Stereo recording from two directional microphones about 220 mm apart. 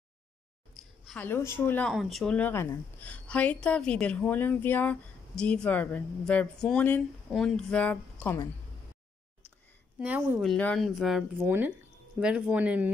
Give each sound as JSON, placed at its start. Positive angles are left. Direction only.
{"t": 0.7, "sound": "a woman's voice", "side_deg": 5}
{"t": 9.9, "sound": "a woman's voice", "side_deg": -5}